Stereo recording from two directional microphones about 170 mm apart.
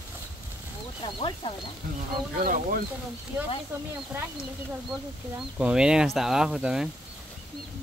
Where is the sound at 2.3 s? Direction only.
55° right (ahead or behind).